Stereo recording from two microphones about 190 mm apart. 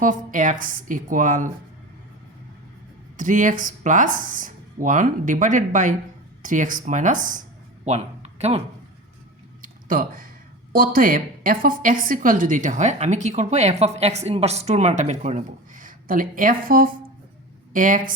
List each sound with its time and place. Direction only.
0.0 s a woman's voice: 45° right (ahead or behind)
3.2 s a woman's voice: 45° right (ahead or behind)
9.6 s a sound: 45° right (ahead or behind)
10.7 s a woman's voice: 50° right (ahead or behind)